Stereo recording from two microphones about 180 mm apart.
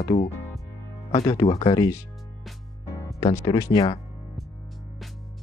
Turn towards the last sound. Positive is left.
turn(degrees=20)  # may be behind; listen again after turning